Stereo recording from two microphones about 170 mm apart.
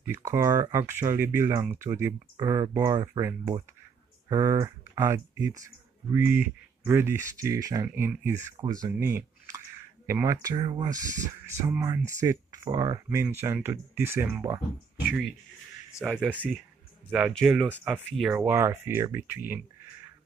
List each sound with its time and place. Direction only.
0.0 s speech: 15° right (ahead or behind)
10.0 s speech: 15° right (ahead or behind)
16.0 s speech: 5° right (ahead or behind)
18.6 s speech: 15° right (ahead or behind)